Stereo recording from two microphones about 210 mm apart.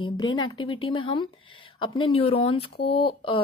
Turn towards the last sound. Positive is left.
turn(degrees=25)  # may be behind; listen again after turning